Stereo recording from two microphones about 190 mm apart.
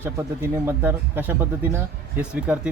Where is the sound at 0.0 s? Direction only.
15° right (ahead or behind).